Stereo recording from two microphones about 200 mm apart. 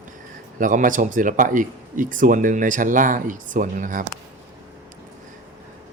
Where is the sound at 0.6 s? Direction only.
40° right (ahead or behind).